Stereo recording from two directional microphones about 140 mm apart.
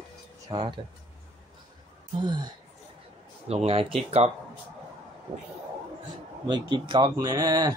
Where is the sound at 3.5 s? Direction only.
45° right (ahead or behind).